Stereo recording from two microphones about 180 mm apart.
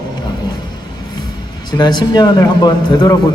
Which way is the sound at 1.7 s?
25° left (ahead or behind).